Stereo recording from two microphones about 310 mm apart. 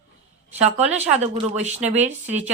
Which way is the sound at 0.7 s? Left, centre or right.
Right.